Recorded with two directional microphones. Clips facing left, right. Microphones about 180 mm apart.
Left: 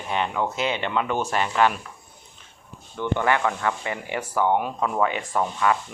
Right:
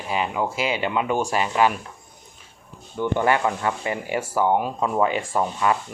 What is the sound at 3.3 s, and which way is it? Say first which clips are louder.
Speech: right 1 dB; 20° right (ahead or behind).